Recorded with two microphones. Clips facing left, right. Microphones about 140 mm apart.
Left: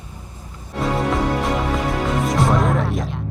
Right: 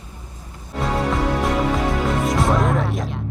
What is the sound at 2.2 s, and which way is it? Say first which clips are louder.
Speech: left 1 dB; centre (ahead or behind).